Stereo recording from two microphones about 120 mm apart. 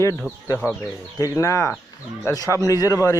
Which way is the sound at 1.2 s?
30° left (ahead or behind).